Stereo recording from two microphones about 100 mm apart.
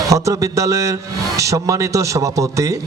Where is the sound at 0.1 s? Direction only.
35° right (ahead or behind).